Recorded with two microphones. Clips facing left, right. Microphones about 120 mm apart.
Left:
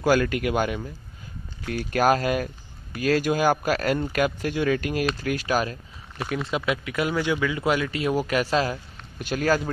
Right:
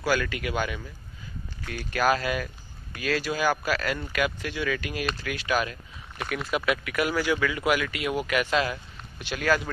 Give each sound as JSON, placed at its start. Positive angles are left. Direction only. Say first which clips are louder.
{"t": 0.0, "sound": "speech", "louder": "left 6 dB", "side_deg": 45}
{"t": 6.1, "sound": "speech", "louder": "left 2 dB", "side_deg": 25}